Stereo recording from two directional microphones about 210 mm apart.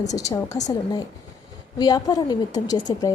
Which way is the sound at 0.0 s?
15° left (ahead or behind).